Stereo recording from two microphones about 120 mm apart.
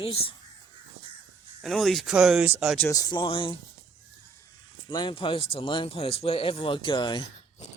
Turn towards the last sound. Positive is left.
turn(degrees=40)  # may be behind; listen again after turning